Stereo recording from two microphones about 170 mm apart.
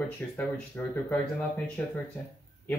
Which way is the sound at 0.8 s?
10° left (ahead or behind).